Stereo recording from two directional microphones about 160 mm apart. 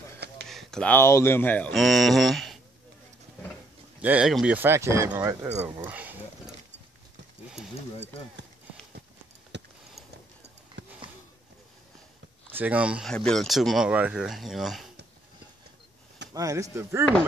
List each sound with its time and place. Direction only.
0.5 s speech: centre (ahead or behind)
4.0 s speech: 5° right (ahead or behind)
9.5 s tick: 90° right
10.8 s a sound: 90° right
12.4 s speech: 10° right (ahead or behind)
13.1 s speech: 5° left (ahead or behind)
16.3 s speech: 20° right (ahead or behind)